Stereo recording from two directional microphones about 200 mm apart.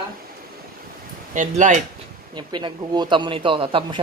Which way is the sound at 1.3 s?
40° right (ahead or behind).